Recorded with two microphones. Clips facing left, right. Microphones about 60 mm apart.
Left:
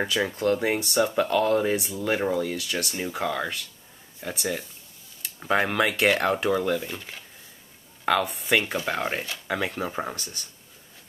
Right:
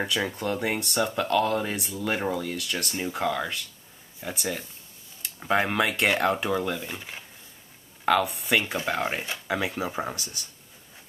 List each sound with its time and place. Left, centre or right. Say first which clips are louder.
0.0 s speech: left 3 dB; centre
6.9 s speech: even; centre
8.0 s speech: right 1 dB; centre